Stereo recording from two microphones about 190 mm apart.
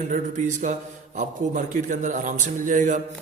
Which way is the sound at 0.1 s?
40° right (ahead or behind).